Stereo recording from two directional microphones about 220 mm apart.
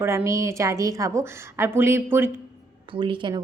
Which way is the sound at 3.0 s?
20° right (ahead or behind).